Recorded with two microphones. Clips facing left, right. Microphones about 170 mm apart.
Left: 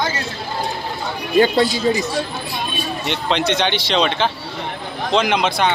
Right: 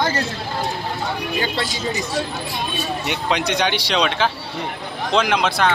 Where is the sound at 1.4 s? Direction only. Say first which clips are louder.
Left 15 dB; 45° left (ahead or behind).